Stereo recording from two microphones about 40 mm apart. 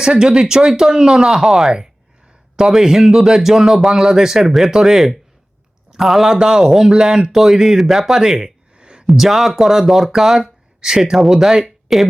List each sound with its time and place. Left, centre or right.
0.0 s a man's voice: centre
6.3 s speech: centre
6.7 s speech: centre
8.7 s a sound: right
9.0 s speech: centre